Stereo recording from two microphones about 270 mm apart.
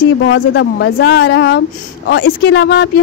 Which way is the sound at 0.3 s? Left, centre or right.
Left.